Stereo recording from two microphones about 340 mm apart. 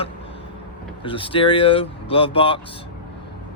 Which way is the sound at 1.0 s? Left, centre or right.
Centre.